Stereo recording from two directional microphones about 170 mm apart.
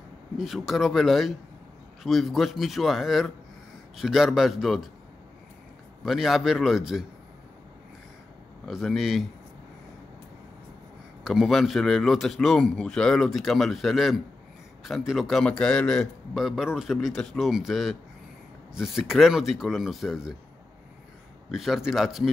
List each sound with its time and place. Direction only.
0.4 s a man's voice: centre (ahead or behind)
6.0 s a man's voice: centre (ahead or behind)
8.6 s a man's voice: centre (ahead or behind)
11.2 s a man's voice: centre (ahead or behind)
21.5 s a man's voice: centre (ahead or behind)